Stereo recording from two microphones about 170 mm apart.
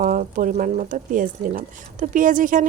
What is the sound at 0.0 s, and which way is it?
Speech, 50° right (ahead or behind).